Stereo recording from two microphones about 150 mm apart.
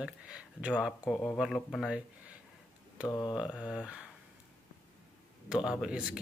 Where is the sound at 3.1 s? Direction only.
25° left (ahead or behind).